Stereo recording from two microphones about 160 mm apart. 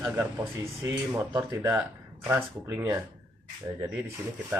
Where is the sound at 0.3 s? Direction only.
15° right (ahead or behind).